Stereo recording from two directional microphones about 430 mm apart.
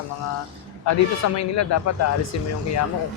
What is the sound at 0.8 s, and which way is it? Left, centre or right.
A man's voice, left.